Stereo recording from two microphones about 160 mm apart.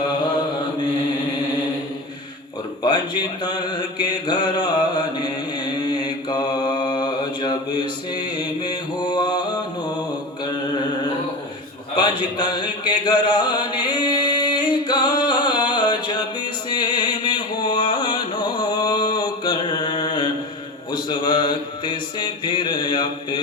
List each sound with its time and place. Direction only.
3.4 s music: 25° left (ahead or behind)
4.0 s mantra: 25° left (ahead or behind)
6.3 s mantra: 25° left (ahead or behind)
11.9 s a sound: 30° left (ahead or behind)
13.1 s music: 30° left (ahead or behind)
13.9 s a sound: 30° left (ahead or behind)
16.6 s music: 25° left (ahead or behind)
20.9 s mantra: 25° left (ahead or behind)